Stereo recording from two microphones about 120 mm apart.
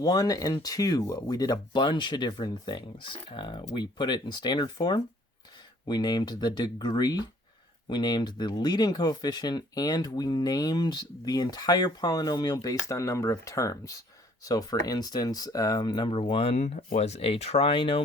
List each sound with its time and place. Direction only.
0.0 s speech: 30° left (ahead or behind)
15.8 s speech: 45° left (ahead or behind)